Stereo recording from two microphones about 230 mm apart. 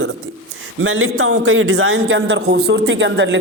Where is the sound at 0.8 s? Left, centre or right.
Right.